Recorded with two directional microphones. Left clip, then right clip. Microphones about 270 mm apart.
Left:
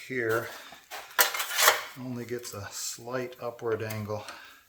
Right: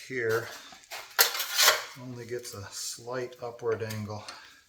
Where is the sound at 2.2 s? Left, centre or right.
Left.